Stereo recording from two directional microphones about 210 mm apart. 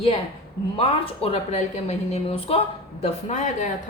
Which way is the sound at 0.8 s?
25° left (ahead or behind).